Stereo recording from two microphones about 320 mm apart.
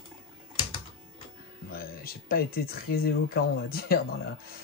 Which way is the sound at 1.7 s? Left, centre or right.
Left.